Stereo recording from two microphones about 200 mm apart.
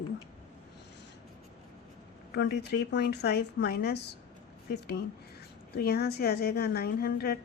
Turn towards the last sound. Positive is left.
turn(degrees=50)  # may be behind; listen again after turning